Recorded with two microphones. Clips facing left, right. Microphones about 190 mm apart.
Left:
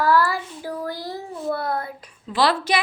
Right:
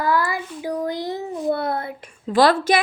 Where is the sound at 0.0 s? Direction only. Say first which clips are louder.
Left 2 dB; 15° right (ahead or behind).